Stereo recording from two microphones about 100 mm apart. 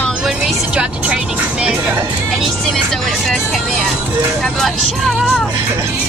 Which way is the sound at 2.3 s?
Centre (ahead or behind).